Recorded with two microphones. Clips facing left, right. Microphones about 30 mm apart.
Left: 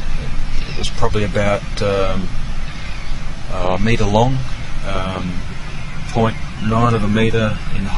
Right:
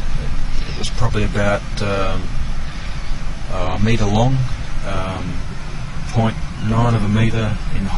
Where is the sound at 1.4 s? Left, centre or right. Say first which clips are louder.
Left 2 dB; centre.